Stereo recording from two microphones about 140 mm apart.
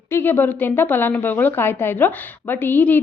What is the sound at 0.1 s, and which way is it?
A woman's voice, 15° left (ahead or behind).